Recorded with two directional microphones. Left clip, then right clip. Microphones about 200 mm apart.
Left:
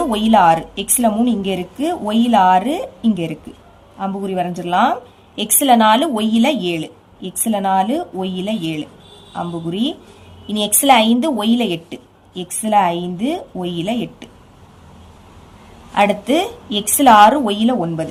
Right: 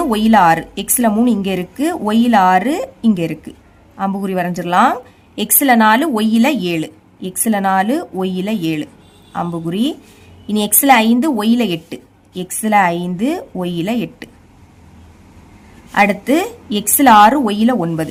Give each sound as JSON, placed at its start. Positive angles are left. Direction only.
{"t": 0.0, "sound": "a woman's voice", "side_deg": -35}
{"t": 15.9, "sound": "a woman's voice", "side_deg": -35}